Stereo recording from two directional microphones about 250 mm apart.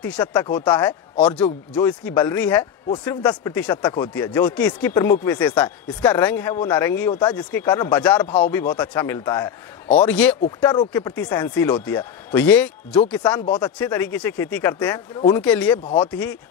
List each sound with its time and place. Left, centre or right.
0.2 s speech: centre
10.6 s speech: centre
13.5 s speech: centre
13.7 s speech: centre
15.4 s speech: centre
15.8 s speech: left
16.1 s speech: centre